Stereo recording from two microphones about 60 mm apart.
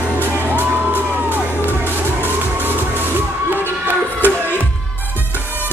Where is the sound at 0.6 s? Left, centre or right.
Right.